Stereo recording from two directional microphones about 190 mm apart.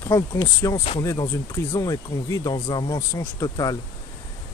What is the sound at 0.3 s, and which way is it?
Speech, 20° left (ahead or behind).